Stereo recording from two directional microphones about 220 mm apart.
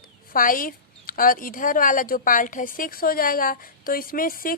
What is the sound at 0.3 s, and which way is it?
A woman's voice, 40° left (ahead or behind).